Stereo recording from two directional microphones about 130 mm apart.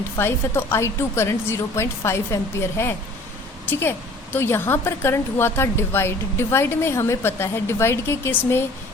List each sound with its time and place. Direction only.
0.2 s a woman's voice: 20° left (ahead or behind)